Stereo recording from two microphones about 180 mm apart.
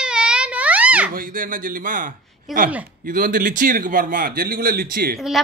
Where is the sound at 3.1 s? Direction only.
50° right (ahead or behind).